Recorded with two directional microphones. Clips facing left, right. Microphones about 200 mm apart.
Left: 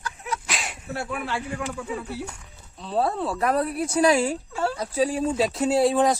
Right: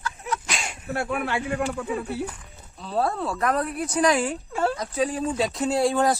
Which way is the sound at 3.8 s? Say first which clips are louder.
Left 2 dB; 30° left (ahead or behind).